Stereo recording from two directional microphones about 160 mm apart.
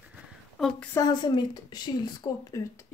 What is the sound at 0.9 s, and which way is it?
Speech, 25° left (ahead or behind).